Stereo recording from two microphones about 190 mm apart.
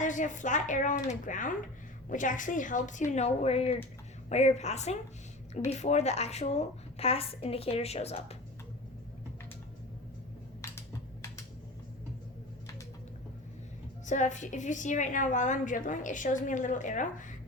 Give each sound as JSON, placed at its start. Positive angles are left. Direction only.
{"t": 0.0, "sound": "a woman's voice", "side_deg": 40}
{"t": 10.6, "sound": "a sound", "side_deg": 15}
{"t": 14.0, "sound": "a woman's voice", "side_deg": 40}